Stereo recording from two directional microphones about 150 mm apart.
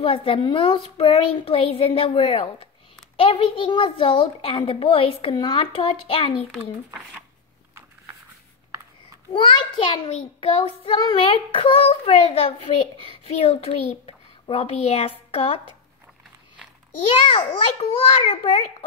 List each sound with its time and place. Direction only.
0.0 s child singing: 35° left (ahead or behind)
10.0 s child singing: 40° left (ahead or behind)
17.3 s child singing: 40° left (ahead or behind)